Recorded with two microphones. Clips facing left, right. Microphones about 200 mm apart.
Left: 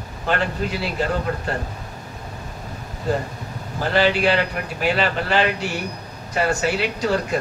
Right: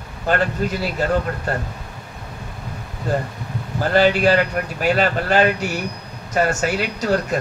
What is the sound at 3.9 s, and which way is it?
A man's voice, 45° right (ahead or behind).